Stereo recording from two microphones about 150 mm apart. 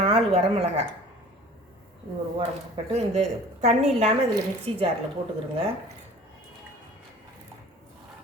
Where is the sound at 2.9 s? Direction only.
50° right (ahead or behind).